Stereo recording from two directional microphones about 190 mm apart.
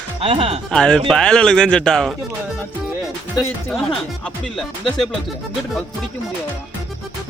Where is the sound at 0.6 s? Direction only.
5° left (ahead or behind).